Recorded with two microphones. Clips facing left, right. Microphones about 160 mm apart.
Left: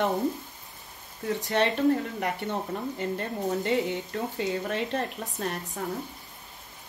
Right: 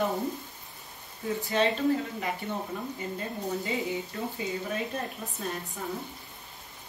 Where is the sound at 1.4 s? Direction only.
70° left (ahead or behind).